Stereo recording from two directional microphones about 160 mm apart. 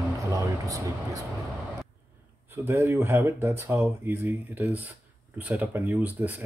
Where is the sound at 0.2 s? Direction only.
20° right (ahead or behind).